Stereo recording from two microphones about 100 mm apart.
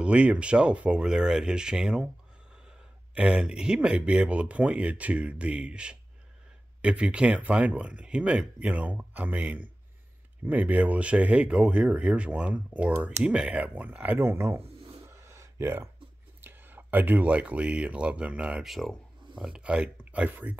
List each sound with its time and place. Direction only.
0.0 s speech: 10° right (ahead or behind)
3.2 s speech: 10° right (ahead or behind); by 14.6 s 25° right (ahead or behind)
15.0 s a sound: 30° right (ahead or behind)
16.3 s speech: 20° right (ahead or behind); by 18.9 s centre (ahead or behind)
19.3 s speech: 10° right (ahead or behind)